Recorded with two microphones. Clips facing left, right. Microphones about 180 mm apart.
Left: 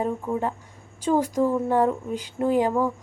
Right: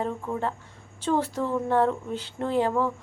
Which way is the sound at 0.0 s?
10° left (ahead or behind).